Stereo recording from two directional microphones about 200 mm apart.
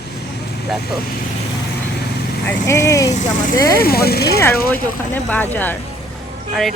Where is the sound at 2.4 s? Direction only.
15° left (ahead or behind).